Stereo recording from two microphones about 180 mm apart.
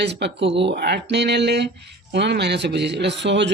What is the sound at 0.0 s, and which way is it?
Speech, 70° right (ahead or behind).